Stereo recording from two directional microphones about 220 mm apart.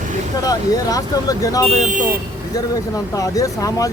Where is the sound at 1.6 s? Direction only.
30° right (ahead or behind).